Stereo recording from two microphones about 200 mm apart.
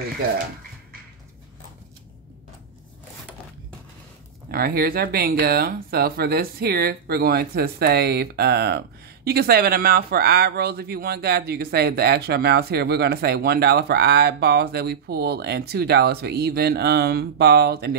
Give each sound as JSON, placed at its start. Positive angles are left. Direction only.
{"t": 4.5, "sound": "speech", "side_deg": -50}